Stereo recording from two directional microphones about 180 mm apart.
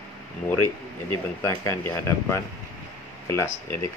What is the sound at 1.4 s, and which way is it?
Speech, 20° left (ahead or behind).